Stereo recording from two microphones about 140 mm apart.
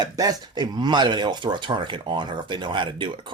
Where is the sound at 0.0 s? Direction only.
30° right (ahead or behind).